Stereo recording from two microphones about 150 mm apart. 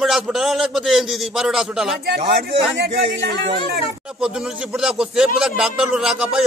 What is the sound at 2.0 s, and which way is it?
Speech, 90° right.